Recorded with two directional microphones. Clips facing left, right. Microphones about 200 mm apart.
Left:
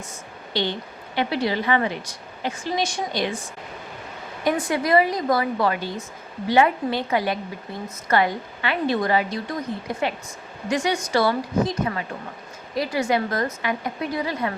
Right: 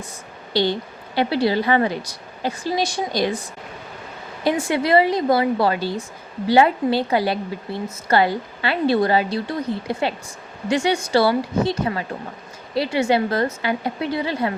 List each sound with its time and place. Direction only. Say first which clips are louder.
0.5 s a woman's voice: right 5 dB; 35° right (ahead or behind)
4.7 s a woman's voice: right 3 dB; 30° right (ahead or behind)